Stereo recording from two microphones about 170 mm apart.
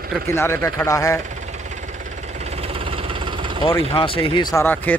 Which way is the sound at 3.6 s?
30° left (ahead or behind).